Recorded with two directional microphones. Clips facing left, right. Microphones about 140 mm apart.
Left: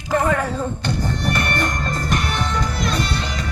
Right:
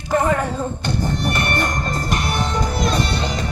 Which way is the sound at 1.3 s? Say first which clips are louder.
Right 1 dB; 25° right (ahead or behind).